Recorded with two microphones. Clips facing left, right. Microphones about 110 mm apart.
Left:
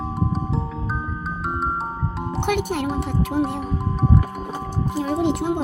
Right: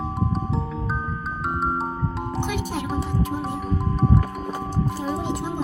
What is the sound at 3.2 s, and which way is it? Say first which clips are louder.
Speech: left 5 dB; 70° left (ahead or behind).